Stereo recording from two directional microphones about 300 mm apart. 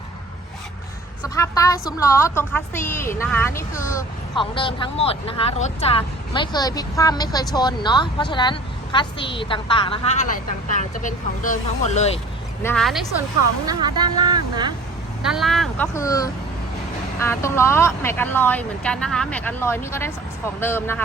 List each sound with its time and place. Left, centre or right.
1.4 s a woman's voice: centre
12.6 s speech: centre
13.7 s speech: centre
15.2 s a woman's voice: centre